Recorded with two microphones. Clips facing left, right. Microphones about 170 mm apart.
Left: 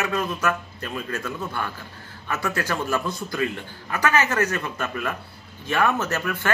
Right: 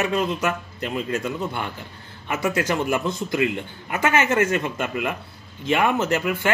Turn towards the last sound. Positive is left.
turn(degrees=-20)  # may be behind; listen again after turning